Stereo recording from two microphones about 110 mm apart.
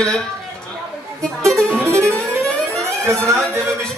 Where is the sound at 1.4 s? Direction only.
25° right (ahead or behind).